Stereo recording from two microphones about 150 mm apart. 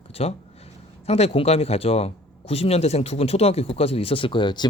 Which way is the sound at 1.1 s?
45° left (ahead or behind).